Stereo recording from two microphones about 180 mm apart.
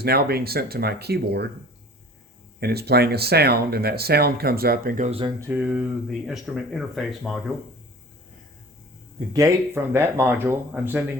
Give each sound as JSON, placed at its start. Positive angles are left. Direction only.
{"t": 0.0, "sound": "speech", "side_deg": -60}
{"t": 2.6, "sound": "speech", "side_deg": -60}
{"t": 5.4, "sound": "speech", "side_deg": -10}
{"t": 9.1, "sound": "speech", "side_deg": -20}